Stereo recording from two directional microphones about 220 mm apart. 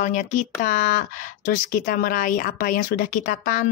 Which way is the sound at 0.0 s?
35° left (ahead or behind).